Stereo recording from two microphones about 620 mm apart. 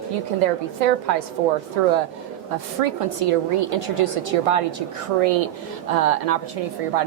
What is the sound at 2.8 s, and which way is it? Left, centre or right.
A woman's voice, right.